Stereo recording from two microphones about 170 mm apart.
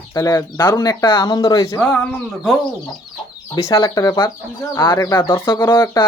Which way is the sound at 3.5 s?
20° left (ahead or behind).